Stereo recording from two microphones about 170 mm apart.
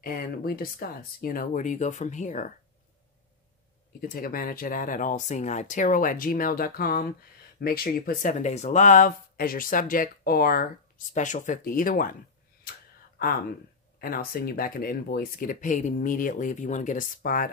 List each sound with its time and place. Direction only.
0.0 s speech: 55° left (ahead or behind)
4.0 s speech: 55° left (ahead or behind)
11.1 s speech: 45° left (ahead or behind)
14.0 s speech: 60° left (ahead or behind)